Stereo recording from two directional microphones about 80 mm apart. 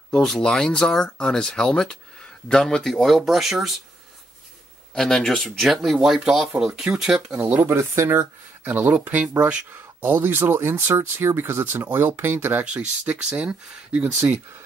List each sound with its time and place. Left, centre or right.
0.1 s speech: centre
4.9 s speech: centre
7.3 s speech: right
8.6 s speech: right
14.2 s speech: right